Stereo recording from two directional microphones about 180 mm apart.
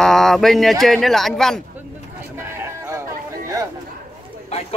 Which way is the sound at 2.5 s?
15° right (ahead or behind).